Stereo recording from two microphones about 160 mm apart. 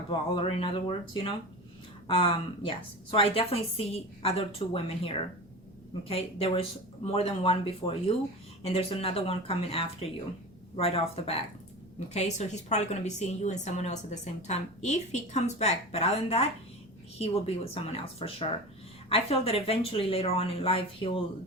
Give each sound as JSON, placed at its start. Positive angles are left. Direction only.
{"t": 0.1, "sound": "a woman's voice", "side_deg": 35}